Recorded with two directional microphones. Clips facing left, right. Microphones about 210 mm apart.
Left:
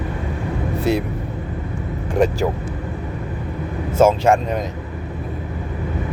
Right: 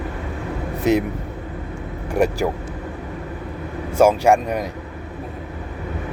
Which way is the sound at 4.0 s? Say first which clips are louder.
Even; 15° right (ahead or behind).